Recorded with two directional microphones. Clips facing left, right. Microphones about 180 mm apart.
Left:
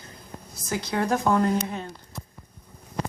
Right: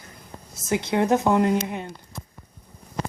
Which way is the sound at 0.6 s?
25° right (ahead or behind).